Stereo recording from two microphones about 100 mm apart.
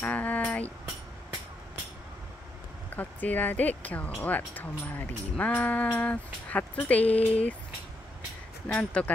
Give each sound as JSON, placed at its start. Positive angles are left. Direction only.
{"t": 0.0, "sound": "a sound", "side_deg": 15}
{"t": 2.9, "sound": "speech", "side_deg": 15}
{"t": 8.7, "sound": "speech", "side_deg": 15}